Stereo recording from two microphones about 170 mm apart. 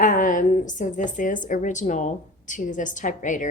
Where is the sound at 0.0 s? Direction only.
50° left (ahead or behind).